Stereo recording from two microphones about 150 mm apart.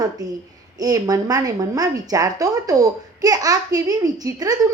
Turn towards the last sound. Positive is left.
turn(degrees=-25)  # may be behind; listen again after turning